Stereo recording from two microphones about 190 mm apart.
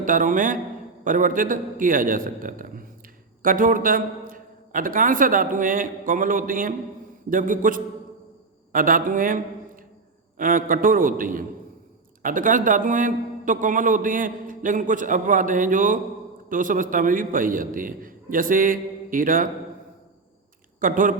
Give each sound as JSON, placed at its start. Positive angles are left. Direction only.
{"t": 0.0, "sound": "a man's voice", "side_deg": -45}
{"t": 20.8, "sound": "a man's voice", "side_deg": -45}